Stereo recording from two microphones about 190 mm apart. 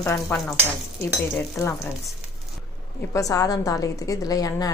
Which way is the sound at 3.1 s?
15° left (ahead or behind).